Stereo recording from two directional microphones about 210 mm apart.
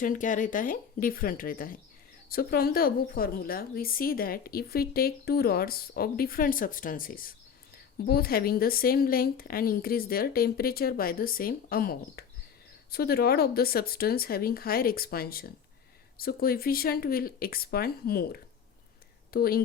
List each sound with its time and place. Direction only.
0.0 s a woman's voice: 40° left (ahead or behind)